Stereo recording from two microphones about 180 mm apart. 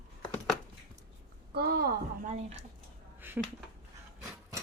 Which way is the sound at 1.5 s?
65° right (ahead or behind).